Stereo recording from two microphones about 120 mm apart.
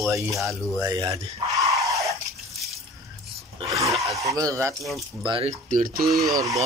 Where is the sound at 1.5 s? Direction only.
30° right (ahead or behind).